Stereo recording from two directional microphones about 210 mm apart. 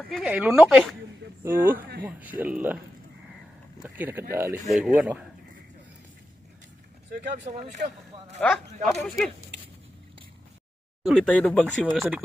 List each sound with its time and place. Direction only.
0.1 s speech: centre (ahead or behind)
3.8 s speech: 10° right (ahead or behind)
7.4 s speech: 35° right (ahead or behind)
8.4 s speech: 5° left (ahead or behind)
11.0 s speech: centre (ahead or behind)
11.9 s speech: 10° right (ahead or behind)